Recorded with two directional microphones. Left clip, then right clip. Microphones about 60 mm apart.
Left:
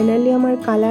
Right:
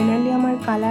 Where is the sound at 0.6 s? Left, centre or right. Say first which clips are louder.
Left 5 dB; left.